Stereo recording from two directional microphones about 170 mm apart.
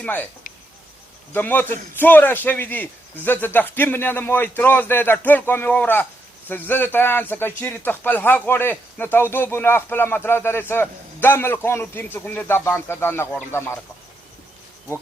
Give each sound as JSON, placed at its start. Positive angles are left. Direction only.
{"t": 0.0, "sound": "a man's voice", "side_deg": 10}
{"t": 1.3, "sound": "a man's voice", "side_deg": 10}